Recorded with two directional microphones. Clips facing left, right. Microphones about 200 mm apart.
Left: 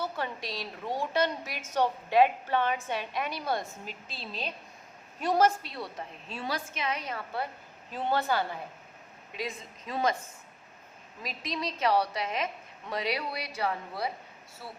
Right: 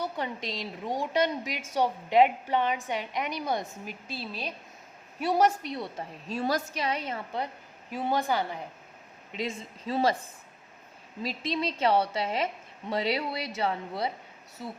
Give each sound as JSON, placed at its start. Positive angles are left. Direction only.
{"t": 0.0, "sound": "a woman's voice", "side_deg": -20}
{"t": 6.2, "sound": "a woman's voice", "side_deg": -40}
{"t": 9.3, "sound": "a woman's voice", "side_deg": -25}
{"t": 11.2, "sound": "a woman's voice", "side_deg": -30}